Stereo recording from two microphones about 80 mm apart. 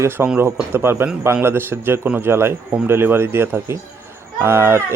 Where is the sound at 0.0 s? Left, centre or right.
Right.